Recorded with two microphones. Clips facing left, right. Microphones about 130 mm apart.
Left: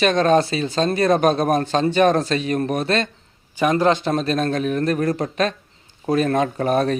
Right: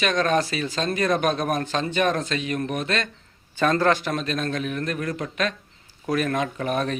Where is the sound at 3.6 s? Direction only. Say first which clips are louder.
Left 3 dB; 15° left (ahead or behind).